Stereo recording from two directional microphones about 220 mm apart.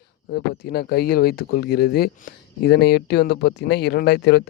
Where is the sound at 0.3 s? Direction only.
45° left (ahead or behind).